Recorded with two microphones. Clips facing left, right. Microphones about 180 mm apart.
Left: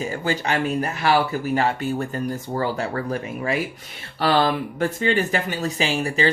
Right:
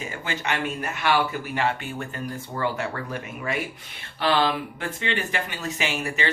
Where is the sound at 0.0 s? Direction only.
35° left (ahead or behind).